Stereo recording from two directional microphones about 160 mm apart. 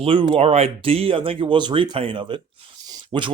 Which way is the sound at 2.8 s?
30° right (ahead or behind).